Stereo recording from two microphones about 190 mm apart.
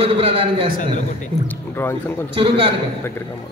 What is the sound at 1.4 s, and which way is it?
Speech, 10° left (ahead or behind).